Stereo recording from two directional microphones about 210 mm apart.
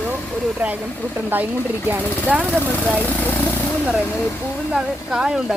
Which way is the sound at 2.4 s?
5° left (ahead or behind).